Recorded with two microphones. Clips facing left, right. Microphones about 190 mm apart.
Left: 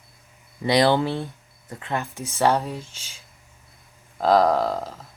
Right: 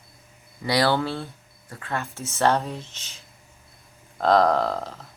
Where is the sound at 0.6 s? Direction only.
20° left (ahead or behind).